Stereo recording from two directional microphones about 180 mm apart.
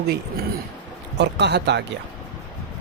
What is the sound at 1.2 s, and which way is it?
Speech, 70° right (ahead or behind).